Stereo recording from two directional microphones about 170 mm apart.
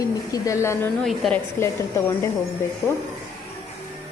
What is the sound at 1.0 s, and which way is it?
Speech, centre (ahead or behind).